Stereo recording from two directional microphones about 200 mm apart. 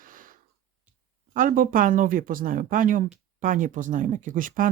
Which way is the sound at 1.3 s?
45° right (ahead or behind).